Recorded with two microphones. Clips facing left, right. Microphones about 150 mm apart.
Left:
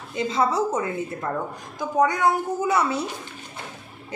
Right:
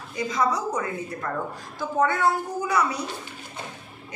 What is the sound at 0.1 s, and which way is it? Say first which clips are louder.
A woman's voice: left 2 dB; 25° left (ahead or behind).